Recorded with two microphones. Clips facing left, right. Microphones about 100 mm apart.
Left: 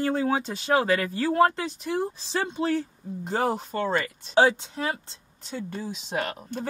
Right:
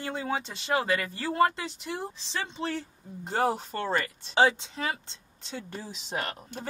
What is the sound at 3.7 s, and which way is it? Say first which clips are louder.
Speech: left 5 dB; 15° left (ahead or behind).